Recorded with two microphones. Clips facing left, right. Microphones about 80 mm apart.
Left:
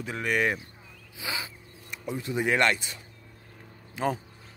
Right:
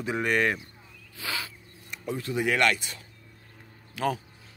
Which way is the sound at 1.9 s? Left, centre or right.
Centre.